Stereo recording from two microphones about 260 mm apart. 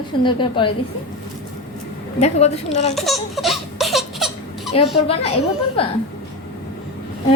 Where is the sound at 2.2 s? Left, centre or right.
Left.